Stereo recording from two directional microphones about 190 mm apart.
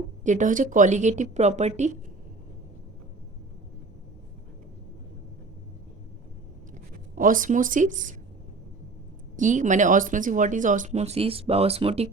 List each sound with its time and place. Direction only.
0.3 s speech: 40° right (ahead or behind)
7.2 s speech: 45° right (ahead or behind)
9.3 s speech: 40° right (ahead or behind)